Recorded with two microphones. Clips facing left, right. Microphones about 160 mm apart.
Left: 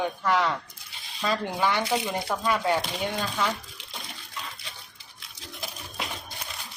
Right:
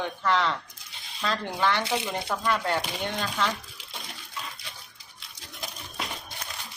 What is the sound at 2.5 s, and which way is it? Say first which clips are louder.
Speech: left 2 dB; 5° left (ahead or behind).